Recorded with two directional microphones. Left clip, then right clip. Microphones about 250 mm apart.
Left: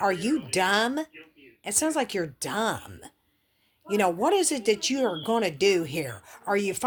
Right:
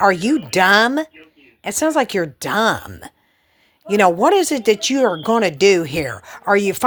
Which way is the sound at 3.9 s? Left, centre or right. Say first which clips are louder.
Right 10 dB; right.